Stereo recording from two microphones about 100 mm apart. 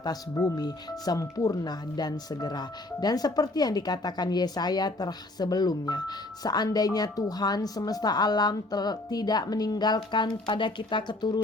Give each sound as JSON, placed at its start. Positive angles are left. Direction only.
{"t": 0.0, "sound": "speech", "side_deg": 35}